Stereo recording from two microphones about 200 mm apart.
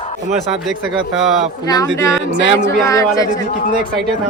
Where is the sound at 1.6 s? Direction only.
20° left (ahead or behind).